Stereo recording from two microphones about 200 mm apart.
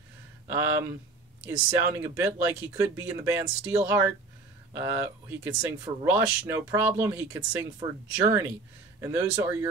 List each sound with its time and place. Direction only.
0.5 s speech: 10° right (ahead or behind)